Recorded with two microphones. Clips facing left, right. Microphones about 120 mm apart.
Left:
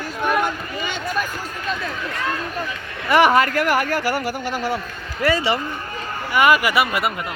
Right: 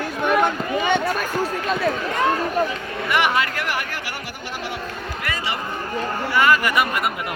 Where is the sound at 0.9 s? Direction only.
65° right (ahead or behind).